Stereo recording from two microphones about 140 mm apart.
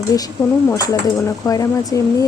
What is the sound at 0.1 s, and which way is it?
Speech, 25° left (ahead or behind).